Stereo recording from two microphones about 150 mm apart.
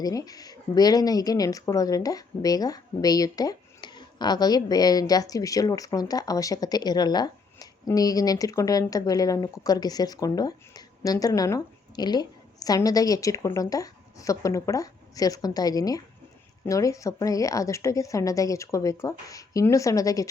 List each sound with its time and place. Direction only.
0.0 s speech: 25° left (ahead or behind)